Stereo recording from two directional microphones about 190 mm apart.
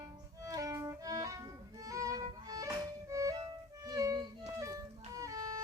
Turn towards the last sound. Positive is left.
turn(degrees=-20)  # may be behind; listen again after turning